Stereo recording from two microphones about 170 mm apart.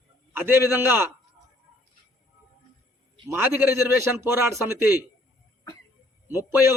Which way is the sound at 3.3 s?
10° right (ahead or behind).